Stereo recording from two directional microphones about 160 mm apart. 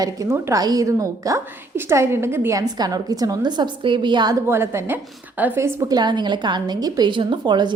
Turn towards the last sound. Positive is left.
turn(degrees=-25)  # may be behind; listen again after turning